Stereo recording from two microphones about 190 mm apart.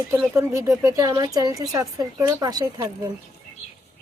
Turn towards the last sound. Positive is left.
turn(degrees=-20)  # may be behind; listen again after turning